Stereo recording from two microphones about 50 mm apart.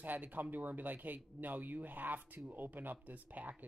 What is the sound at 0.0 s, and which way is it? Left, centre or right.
Speech, right.